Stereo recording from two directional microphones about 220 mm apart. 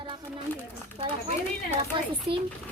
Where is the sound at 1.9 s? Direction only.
25° right (ahead or behind).